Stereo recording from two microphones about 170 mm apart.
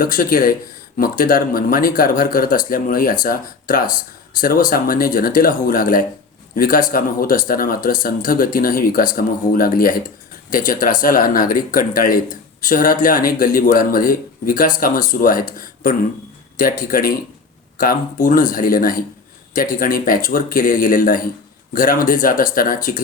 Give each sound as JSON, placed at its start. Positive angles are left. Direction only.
{"t": 0.0, "sound": "speech", "side_deg": 60}